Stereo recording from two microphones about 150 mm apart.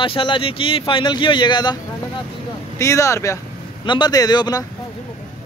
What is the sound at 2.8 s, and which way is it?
Speech, 20° left (ahead or behind).